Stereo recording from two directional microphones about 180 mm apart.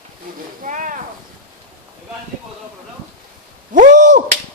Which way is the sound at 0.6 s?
45° right (ahead or behind).